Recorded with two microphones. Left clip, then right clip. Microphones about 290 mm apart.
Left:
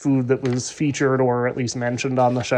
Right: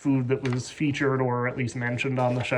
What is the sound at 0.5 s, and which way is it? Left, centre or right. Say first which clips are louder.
Speech: left 5 dB; centre.